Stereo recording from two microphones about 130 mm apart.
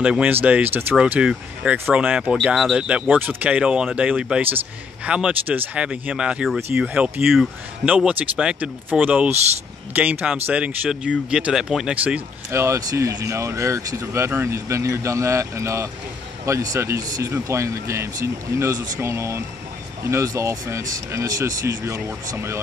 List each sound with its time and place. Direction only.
0.0 s speech: 10° right (ahead or behind)
12.4 s speech: 20° right (ahead or behind)